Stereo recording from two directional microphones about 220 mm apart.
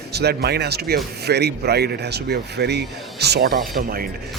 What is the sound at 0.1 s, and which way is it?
Speech, 50° right (ahead or behind).